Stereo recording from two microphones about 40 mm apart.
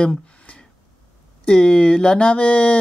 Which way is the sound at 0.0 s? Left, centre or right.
Left.